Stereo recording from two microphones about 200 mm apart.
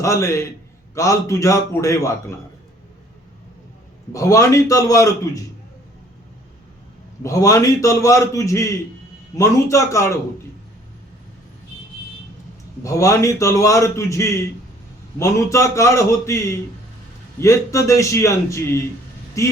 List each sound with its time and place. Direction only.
0.0 s a man's voice: 15° left (ahead or behind)
4.1 s a man's voice: 15° left (ahead or behind)
7.2 s a man's voice: 15° left (ahead or behind)
12.8 s a man's voice: 15° left (ahead or behind)